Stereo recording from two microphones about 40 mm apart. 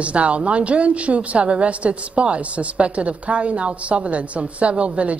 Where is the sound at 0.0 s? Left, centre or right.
Right.